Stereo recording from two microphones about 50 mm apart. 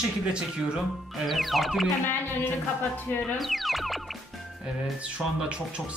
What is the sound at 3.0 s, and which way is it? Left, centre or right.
Speech, left.